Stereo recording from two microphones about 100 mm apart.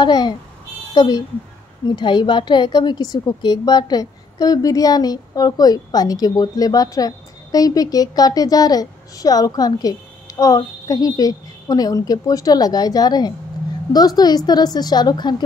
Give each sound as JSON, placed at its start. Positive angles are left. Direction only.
{"t": 0.0, "sound": "a woman's voice", "side_deg": 45}